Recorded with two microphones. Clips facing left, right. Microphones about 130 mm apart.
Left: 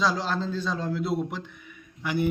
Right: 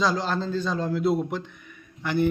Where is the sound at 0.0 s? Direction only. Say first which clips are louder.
Right 1 dB; centre (ahead or behind).